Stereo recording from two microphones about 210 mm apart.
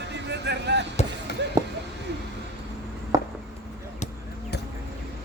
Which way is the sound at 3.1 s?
15° right (ahead or behind).